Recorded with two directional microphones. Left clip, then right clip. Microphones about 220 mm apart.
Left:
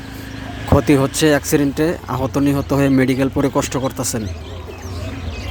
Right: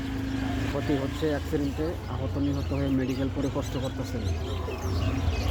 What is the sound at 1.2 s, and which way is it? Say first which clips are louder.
A man's voice: left 14 dB; 30° left (ahead or behind).